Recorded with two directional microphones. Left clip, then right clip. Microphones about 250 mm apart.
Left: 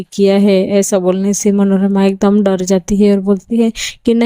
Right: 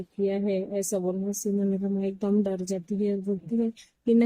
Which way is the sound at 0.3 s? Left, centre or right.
Left.